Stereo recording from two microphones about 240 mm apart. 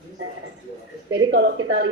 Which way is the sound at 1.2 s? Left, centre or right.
Right.